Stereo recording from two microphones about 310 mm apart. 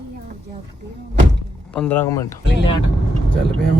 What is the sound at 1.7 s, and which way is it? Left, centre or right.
Speech, centre.